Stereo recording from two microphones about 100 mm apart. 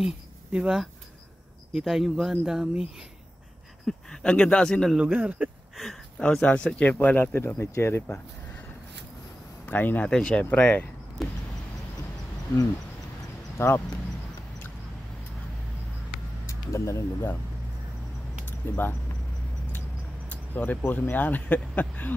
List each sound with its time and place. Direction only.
0.0 s speech: 10° right (ahead or behind)
3.8 s speech: 10° left (ahead or behind)
4.9 s speech: 10° right (ahead or behind)
5.8 s speech: 5° left (ahead or behind); by 8.0 s 25° left (ahead or behind)
9.7 s speech: 20° left (ahead or behind)
10.0 s speech: 10° left (ahead or behind)
11.2 s vehicle: centre (ahead or behind)
13.6 s speech: 25° left (ahead or behind)
16.4 s speech: 30° left (ahead or behind)
18.6 s speech: 20° left (ahead or behind)
20.2 s speech: 15° left (ahead or behind)